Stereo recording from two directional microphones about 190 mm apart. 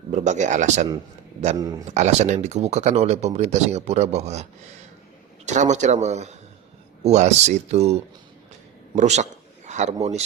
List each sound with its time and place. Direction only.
0.1 s speech: 40° right (ahead or behind)
1.5 s speech: 20° right (ahead or behind)
1.9 s speech: 35° right (ahead or behind)
5.5 s a man's voice: 40° right (ahead or behind)